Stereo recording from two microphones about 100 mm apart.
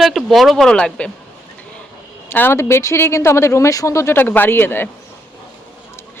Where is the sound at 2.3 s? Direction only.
20° left (ahead or behind).